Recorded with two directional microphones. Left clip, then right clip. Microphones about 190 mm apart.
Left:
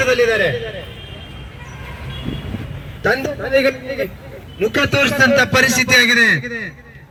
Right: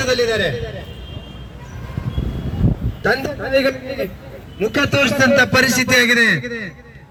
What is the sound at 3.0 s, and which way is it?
A man's voice, 40° left (ahead or behind).